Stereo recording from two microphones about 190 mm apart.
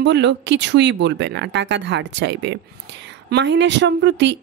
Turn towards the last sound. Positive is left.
turn(degrees=-70)  # may be behind; listen again after turning